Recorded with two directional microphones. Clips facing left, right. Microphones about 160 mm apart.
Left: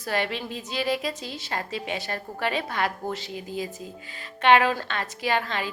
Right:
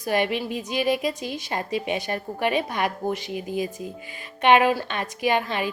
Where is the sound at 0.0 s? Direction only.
15° right (ahead or behind).